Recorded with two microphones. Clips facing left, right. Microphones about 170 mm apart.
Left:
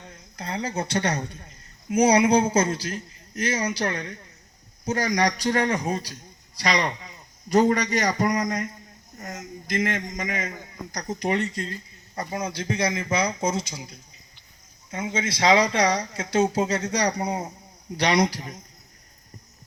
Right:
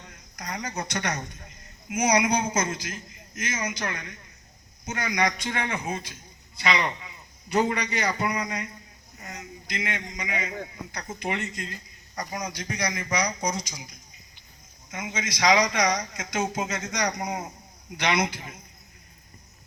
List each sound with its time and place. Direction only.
0.3 s a man's voice: 30° left (ahead or behind)